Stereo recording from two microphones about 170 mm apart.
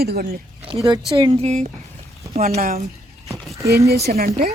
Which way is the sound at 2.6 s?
55° right (ahead or behind).